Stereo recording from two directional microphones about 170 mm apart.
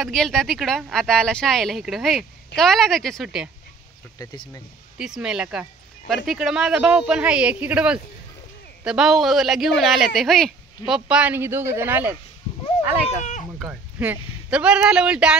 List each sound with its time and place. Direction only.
0.0 s speech: 5° left (ahead or behind)
4.2 s speech: 25° left (ahead or behind)
4.9 s speech: 5° right (ahead or behind)
13.2 s a sound: 45° left (ahead or behind)
13.6 s a man's voice: 10° right (ahead or behind)